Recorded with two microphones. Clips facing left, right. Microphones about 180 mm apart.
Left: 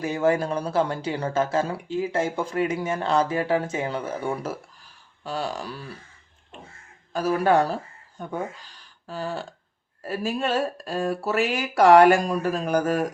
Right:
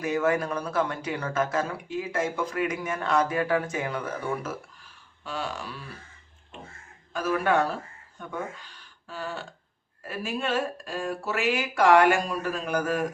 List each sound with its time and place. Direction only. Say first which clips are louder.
0.0 s speech: left 3 dB; 30° left (ahead or behind)
7.1 s speech: left 4 dB; 35° left (ahead or behind)